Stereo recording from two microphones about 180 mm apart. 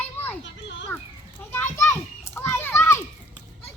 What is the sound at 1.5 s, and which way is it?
Children playing, 15° left (ahead or behind).